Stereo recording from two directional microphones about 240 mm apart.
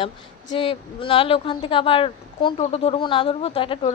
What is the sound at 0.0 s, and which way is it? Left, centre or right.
A woman's voice, left.